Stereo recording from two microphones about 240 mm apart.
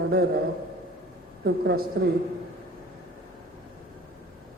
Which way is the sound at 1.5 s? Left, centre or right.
Right.